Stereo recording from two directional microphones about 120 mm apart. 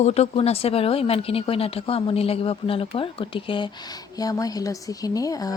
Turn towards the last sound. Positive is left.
turn(degrees=30)  # may be behind; listen again after turning